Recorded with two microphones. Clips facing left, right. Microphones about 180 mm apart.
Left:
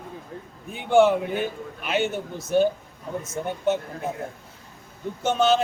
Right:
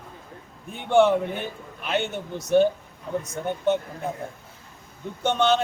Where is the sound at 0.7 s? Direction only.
Centre (ahead or behind).